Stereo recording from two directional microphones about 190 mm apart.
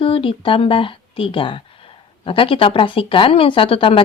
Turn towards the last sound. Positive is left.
turn(degrees=30)  # may be behind; listen again after turning